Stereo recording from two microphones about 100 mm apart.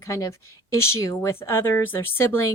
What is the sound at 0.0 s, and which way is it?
Speech, 30° left (ahead or behind).